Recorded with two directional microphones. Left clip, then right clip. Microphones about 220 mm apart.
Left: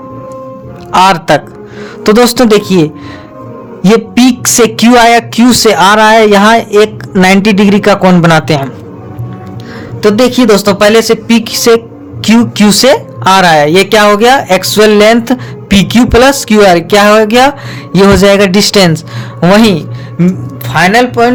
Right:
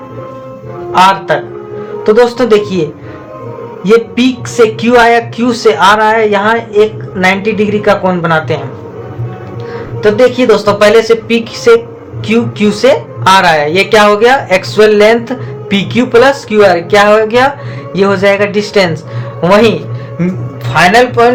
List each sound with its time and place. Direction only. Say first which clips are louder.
0.9 s speech: left 2 dB; 50° left (ahead or behind)
4.4 s speech: left 2 dB; 50° left (ahead or behind)
9.7 s speech: left 1 dB; 50° left (ahead or behind)